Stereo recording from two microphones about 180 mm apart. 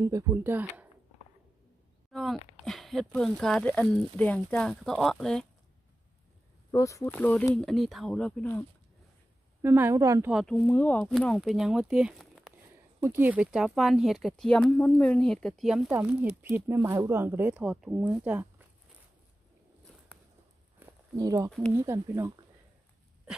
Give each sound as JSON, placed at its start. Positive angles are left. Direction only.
{"t": 0.0, "sound": "speech", "side_deg": -20}
{"t": 2.1, "sound": "speech", "side_deg": 0}
{"t": 6.7, "sound": "speech", "side_deg": 15}
{"t": 9.6, "sound": "speech", "side_deg": -15}
{"t": 10.3, "sound": "speech", "side_deg": 5}
{"t": 20.8, "sound": "a sound", "side_deg": -20}
{"t": 21.7, "sound": "speech", "side_deg": -15}